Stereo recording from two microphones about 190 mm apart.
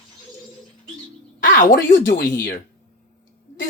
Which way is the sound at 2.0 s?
55° left (ahead or behind).